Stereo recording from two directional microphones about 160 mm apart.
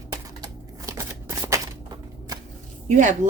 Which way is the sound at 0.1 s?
20° right (ahead or behind).